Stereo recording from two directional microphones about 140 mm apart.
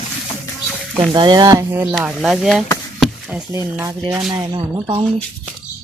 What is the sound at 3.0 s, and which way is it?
Chop, 5° right (ahead or behind).